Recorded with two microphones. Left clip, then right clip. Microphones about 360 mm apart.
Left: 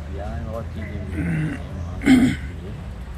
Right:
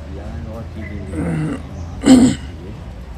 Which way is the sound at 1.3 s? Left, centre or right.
Right.